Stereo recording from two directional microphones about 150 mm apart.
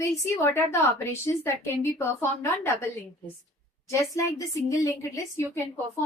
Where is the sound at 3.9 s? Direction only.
20° left (ahead or behind).